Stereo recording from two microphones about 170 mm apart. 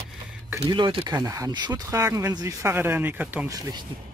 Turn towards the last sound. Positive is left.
turn(degrees=-10)  # may be behind; listen again after turning